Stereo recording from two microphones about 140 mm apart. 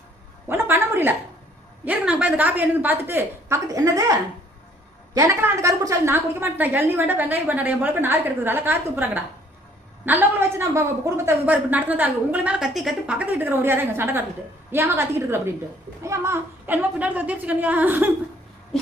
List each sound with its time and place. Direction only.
0.4 s a woman's voice: 15° right (ahead or behind)
5.1 s a woman's voice: 20° right (ahead or behind)